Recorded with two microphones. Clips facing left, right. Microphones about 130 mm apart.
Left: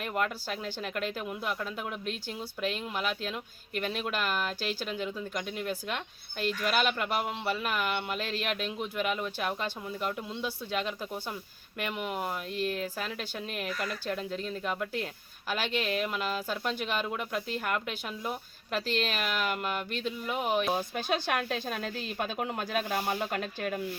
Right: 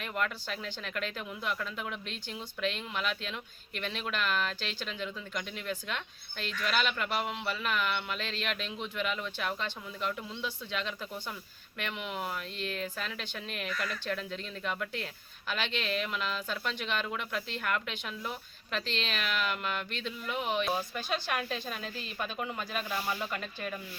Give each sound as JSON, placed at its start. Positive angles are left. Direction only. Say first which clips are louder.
{"t": 0.0, "sound": "speech", "louder": "left 3 dB", "side_deg": 45}
{"t": 4.4, "sound": "speech", "louder": "left 2 dB", "side_deg": 10}
{"t": 4.9, "sound": "speech", "louder": "left 4 dB", "side_deg": 45}